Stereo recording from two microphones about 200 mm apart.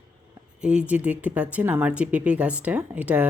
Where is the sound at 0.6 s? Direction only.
5° right (ahead or behind).